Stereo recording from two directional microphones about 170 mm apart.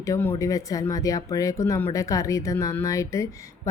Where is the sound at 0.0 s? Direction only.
15° left (ahead or behind).